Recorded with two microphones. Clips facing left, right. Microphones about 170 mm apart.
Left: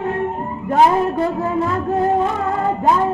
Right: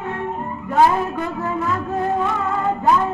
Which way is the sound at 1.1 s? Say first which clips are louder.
Left 5 dB; 30° left (ahead or behind).